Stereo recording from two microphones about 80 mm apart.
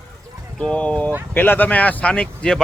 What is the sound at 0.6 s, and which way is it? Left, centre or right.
Speech, centre.